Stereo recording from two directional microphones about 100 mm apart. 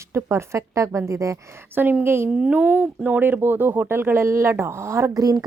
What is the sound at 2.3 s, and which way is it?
A woman's voice, 10° right (ahead or behind).